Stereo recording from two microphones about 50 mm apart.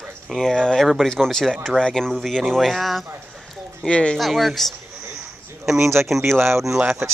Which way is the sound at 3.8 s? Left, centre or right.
Centre.